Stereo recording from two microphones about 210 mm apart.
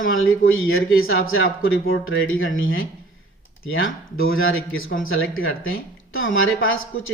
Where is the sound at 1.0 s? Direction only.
75° left (ahead or behind).